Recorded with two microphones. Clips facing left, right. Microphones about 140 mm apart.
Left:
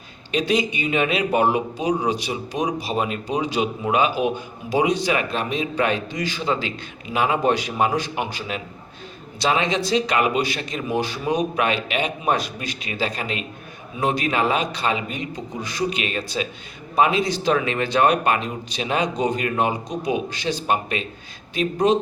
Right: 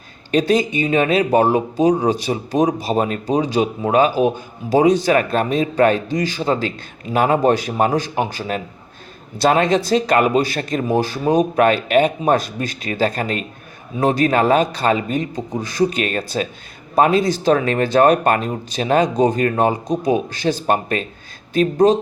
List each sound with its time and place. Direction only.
0.3 s speech: 45° right (ahead or behind)